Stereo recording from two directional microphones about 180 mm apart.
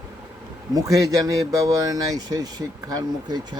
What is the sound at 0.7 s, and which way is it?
Speech, 20° right (ahead or behind).